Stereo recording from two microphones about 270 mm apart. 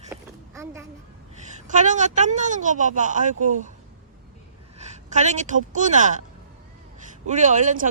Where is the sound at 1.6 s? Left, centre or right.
Right.